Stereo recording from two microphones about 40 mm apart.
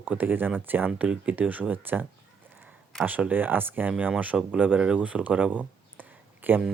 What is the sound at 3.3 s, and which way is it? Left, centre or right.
Speech, right.